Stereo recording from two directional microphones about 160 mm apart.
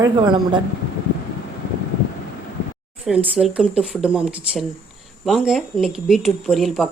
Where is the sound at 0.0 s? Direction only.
25° right (ahead or behind).